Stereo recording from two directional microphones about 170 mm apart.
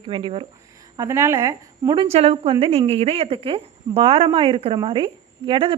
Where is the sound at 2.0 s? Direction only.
35° right (ahead or behind).